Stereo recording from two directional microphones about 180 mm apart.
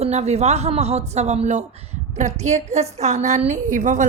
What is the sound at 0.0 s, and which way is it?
A woman's voice, 35° right (ahead or behind).